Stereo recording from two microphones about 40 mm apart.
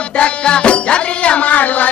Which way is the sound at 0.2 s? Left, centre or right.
Left.